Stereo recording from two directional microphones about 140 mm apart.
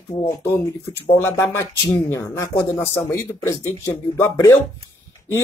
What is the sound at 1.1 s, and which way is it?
Speech, 15° left (ahead or behind).